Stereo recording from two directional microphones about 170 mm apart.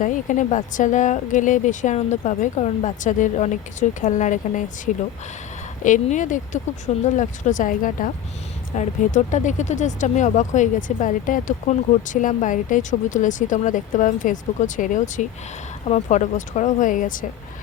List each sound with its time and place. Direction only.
0.0 s speech: 50° left (ahead or behind)
5.8 s speech: 45° left (ahead or behind)